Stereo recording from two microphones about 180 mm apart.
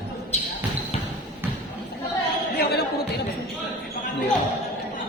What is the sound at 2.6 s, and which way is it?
Speech, 60° left (ahead or behind).